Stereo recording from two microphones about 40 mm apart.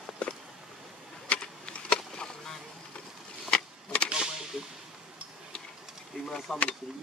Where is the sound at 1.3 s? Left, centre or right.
Left.